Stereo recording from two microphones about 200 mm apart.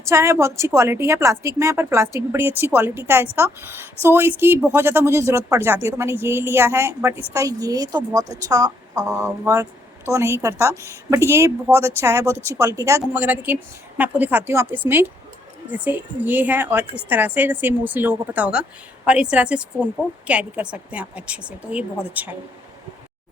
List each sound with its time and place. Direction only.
0.0 s a woman's voice: 15° right (ahead or behind)